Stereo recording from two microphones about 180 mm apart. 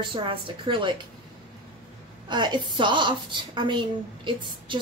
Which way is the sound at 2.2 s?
25° right (ahead or behind).